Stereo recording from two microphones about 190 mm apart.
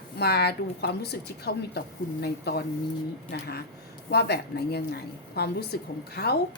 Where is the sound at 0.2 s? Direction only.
60° left (ahead or behind).